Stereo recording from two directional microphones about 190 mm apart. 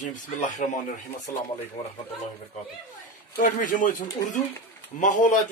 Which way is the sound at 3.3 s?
45° left (ahead or behind).